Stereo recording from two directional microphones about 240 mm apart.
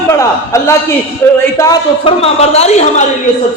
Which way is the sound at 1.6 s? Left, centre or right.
Centre.